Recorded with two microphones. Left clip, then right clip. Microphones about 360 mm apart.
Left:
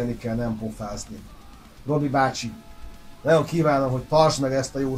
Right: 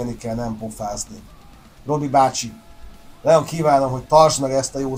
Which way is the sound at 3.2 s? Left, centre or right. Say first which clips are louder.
Right 5 dB; right.